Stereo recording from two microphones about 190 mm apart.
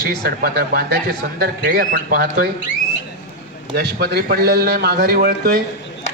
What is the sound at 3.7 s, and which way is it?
A man's voice, 55° right (ahead or behind).